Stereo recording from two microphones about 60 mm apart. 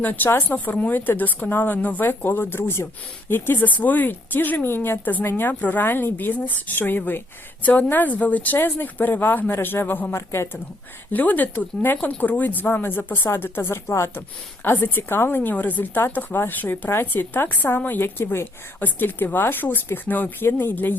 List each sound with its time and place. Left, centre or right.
0.0 s a woman's voice: left
5.5 s a woman's voice: left
10.2 s speech: left
11.1 s a woman's voice: left
14.2 s a woman's voice: left